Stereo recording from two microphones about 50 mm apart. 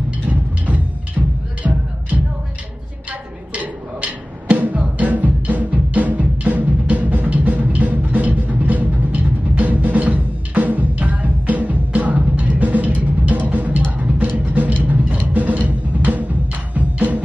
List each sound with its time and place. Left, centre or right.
0.3 s music: right
3.1 s music: right